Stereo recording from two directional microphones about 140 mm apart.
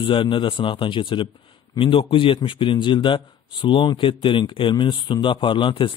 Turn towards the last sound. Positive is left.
turn(degrees=35)  # may be behind; listen again after turning